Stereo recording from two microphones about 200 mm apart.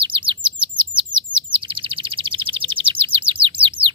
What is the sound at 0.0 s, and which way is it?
Chirp, 25° right (ahead or behind).